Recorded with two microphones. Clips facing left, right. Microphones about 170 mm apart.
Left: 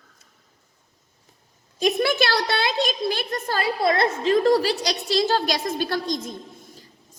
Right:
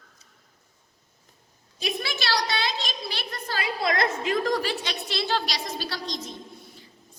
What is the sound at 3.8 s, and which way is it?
A woman's voice, 30° left (ahead or behind).